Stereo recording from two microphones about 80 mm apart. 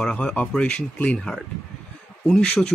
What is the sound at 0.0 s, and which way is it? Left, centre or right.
Speech, centre.